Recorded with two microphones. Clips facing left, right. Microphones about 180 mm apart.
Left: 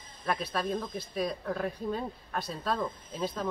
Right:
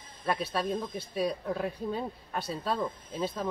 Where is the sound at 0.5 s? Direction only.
5° right (ahead or behind).